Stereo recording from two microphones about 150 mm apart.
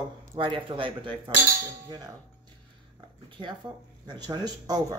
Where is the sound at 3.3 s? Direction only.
30° right (ahead or behind).